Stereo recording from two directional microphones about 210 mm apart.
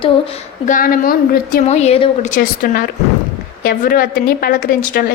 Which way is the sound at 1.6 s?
30° left (ahead or behind).